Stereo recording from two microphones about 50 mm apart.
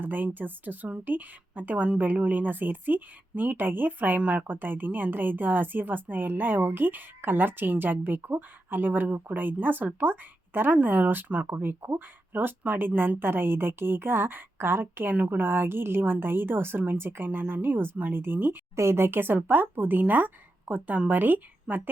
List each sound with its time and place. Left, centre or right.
0.0 s a woman's voice: right
4.2 s a woman's voice: right
15.1 s a woman's voice: right
18.8 s a woman's voice: right